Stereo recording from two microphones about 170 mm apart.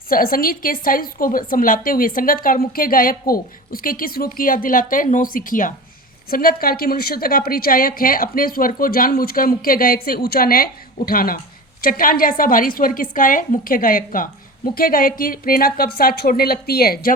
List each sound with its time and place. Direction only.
0.1 s a woman's voice: 60° left (ahead or behind)